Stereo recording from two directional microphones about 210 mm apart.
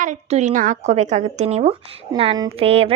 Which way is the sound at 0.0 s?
35° right (ahead or behind).